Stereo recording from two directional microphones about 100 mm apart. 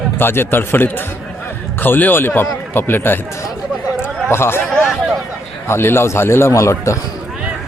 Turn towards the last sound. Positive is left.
turn(degrees=30)  # may be behind; listen again after turning